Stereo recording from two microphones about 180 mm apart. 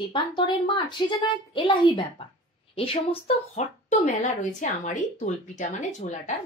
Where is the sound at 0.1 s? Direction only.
30° left (ahead or behind).